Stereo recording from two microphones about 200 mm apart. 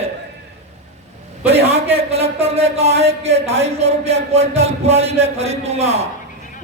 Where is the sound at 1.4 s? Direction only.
30° right (ahead or behind).